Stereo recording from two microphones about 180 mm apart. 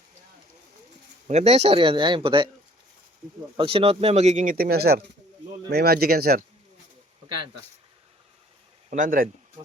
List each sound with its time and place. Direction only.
1.3 s speech: 35° right (ahead or behind)
3.6 s speech: 30° right (ahead or behind); by 6.4 s 55° right (ahead or behind)
8.9 s speech: 50° right (ahead or behind)